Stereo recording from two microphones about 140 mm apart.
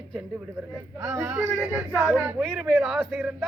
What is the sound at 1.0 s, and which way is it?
Speech, 10° right (ahead or behind).